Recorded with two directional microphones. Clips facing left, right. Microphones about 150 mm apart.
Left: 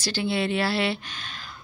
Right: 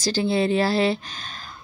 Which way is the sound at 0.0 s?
40° right (ahead or behind).